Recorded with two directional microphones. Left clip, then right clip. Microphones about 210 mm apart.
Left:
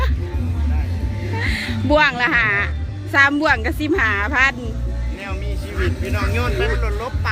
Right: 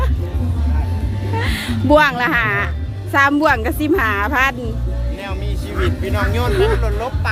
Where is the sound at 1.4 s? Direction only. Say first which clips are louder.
Right 1 dB; 10° right (ahead or behind).